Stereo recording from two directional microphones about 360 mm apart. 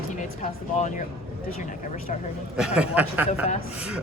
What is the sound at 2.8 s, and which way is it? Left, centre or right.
Speech, centre.